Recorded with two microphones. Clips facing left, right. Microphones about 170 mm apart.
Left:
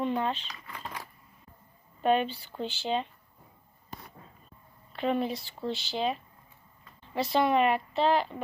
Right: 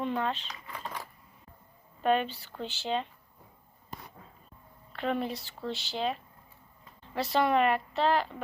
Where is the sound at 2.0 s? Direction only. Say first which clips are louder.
Left 1 dB; 10° left (ahead or behind).